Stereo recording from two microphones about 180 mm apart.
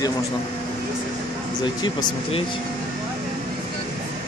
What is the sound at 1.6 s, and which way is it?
Speech, 25° left (ahead or behind).